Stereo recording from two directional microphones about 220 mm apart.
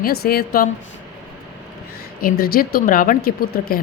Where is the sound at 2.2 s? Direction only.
40° left (ahead or behind).